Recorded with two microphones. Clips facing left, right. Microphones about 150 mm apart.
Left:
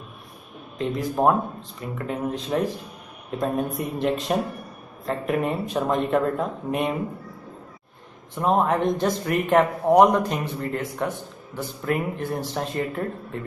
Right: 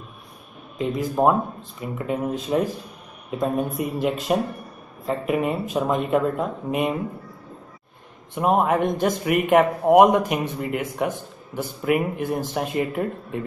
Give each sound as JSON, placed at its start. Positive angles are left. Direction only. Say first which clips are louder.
{"t": 0.7, "sound": "a man's voice", "louder": "right 2 dB", "side_deg": -5}
{"t": 8.4, "sound": "a man's voice", "louder": "right 1 dB", "side_deg": -15}